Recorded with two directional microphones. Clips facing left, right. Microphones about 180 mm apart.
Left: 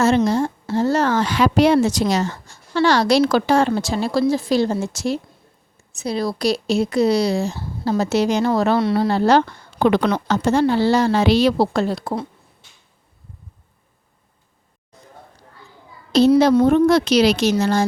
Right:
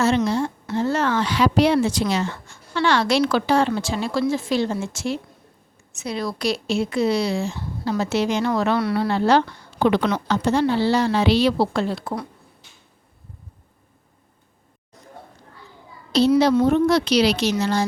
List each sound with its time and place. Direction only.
0.3 s a woman's voice: 45° left (ahead or behind)
16.4 s a woman's voice: 50° left (ahead or behind)